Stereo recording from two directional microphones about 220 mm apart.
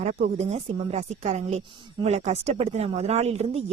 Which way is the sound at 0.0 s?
35° right (ahead or behind).